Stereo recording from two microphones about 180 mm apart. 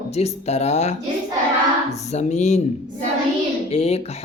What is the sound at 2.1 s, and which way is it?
Speech, 40° left (ahead or behind).